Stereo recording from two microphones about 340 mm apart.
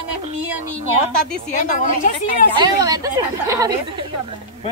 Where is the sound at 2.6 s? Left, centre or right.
Centre.